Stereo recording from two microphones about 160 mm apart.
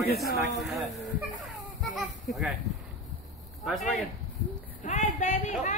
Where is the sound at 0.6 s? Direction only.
Centre (ahead or behind).